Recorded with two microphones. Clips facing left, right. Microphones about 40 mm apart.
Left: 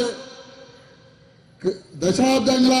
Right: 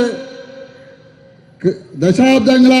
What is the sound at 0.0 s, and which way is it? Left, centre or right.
Speech, right.